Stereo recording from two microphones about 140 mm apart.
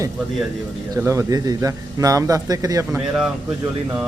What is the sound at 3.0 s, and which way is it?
Speech, 5° right (ahead or behind).